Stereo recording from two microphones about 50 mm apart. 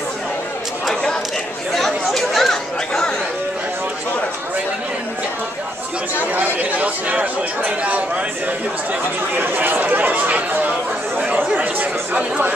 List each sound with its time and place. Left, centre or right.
2.1 s chatter: centre
6.3 s speech: right
9.4 s speech: right
11.5 s chatter: right